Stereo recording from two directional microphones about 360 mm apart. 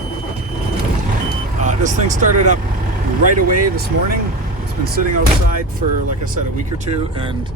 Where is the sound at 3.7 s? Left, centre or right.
Right.